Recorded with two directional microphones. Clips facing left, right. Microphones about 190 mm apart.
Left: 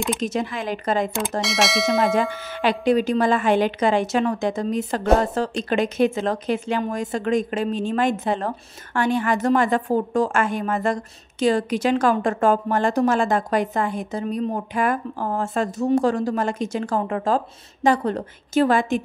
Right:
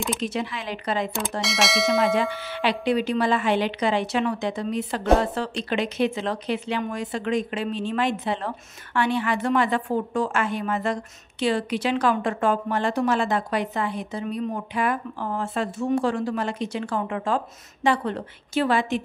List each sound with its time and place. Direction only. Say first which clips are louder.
0.2 s speech: left 3 dB; 45° left (ahead or behind)
1.4 s speech: left 1 dB; centre (ahead or behind)
2.1 s speech: left 2 dB; 45° left (ahead or behind)